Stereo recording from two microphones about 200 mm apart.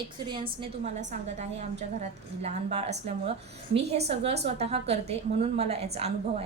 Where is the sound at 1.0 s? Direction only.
35° right (ahead or behind).